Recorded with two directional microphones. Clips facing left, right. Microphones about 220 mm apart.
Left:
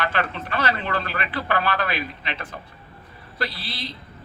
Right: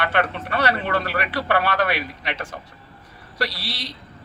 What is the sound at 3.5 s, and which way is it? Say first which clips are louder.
Speech: right 1 dB; 85° right.